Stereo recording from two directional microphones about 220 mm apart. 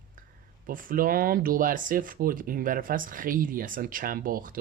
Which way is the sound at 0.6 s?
40° right (ahead or behind).